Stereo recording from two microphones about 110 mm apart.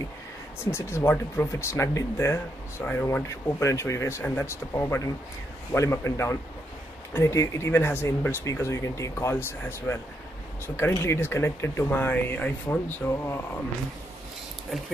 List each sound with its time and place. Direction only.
0.7 s speech: 20° left (ahead or behind)